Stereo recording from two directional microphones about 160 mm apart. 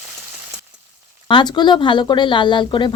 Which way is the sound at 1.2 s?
30° left (ahead or behind).